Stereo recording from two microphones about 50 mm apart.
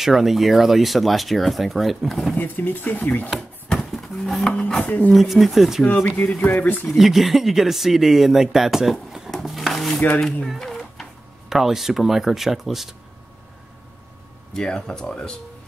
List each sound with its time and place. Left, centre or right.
0.0 s speech: centre
2.3 s speech: left
3.7 s a sound: centre
4.6 s a sound: left
5.1 s speech: centre
6.0 s speech: left
7.0 s speech: centre
9.3 s a sound: centre
9.9 s speech: left
10.6 s a sound: centre
11.4 s speech: centre
14.5 s speech: centre